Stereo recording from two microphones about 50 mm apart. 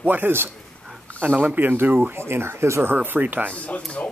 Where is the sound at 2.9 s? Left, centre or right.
Right.